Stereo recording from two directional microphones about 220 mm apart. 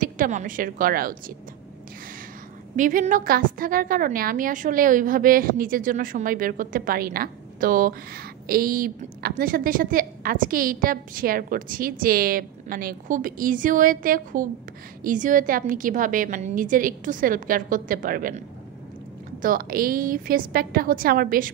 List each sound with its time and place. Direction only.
0.0 s a woman's voice: 35° right (ahead or behind)
2.7 s a woman's voice: 35° right (ahead or behind)
19.4 s a woman's voice: 40° right (ahead or behind)